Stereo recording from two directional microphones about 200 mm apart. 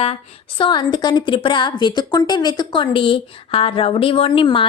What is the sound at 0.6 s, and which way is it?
A woman's voice, 20° left (ahead or behind).